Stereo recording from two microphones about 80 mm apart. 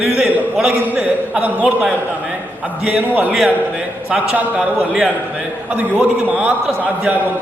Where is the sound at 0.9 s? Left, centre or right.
Centre.